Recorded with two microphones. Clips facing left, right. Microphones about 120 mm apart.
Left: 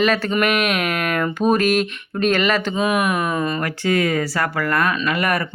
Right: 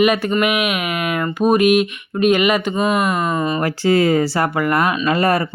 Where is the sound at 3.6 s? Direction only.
30° right (ahead or behind).